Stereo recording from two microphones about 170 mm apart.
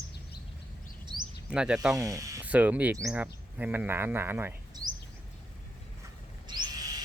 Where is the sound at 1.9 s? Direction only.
20° right (ahead or behind).